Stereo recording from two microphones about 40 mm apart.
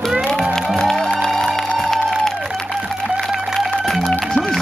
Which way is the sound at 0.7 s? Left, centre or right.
Centre.